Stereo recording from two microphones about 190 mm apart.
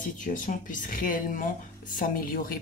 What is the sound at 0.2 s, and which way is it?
Speech, 45° left (ahead or behind).